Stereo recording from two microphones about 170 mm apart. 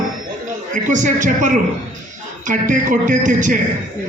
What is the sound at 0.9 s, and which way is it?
A man's voice, 50° right (ahead or behind).